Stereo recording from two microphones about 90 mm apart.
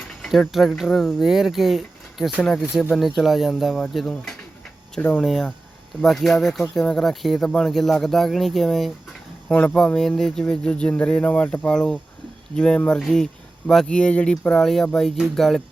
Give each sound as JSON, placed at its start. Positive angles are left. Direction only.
{"t": 0.2, "sound": "speech", "side_deg": 0}
{"t": 4.9, "sound": "speech", "side_deg": 15}
{"t": 5.2, "sound": "speech", "side_deg": 0}